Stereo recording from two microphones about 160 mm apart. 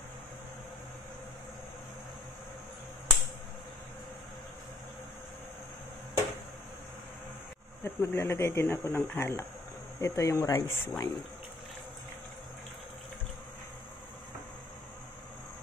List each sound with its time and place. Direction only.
7.8 s speech: 15° left (ahead or behind)